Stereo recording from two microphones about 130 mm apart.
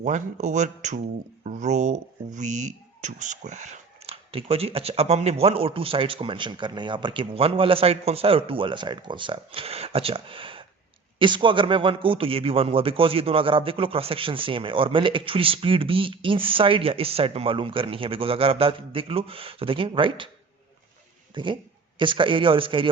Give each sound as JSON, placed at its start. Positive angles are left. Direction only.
{"t": 0.0, "sound": "speech", "side_deg": -65}
{"t": 21.3, "sound": "a man's voice", "side_deg": -40}